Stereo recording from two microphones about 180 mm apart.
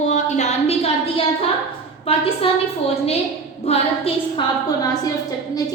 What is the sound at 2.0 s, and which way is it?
Speech, 30° left (ahead or behind).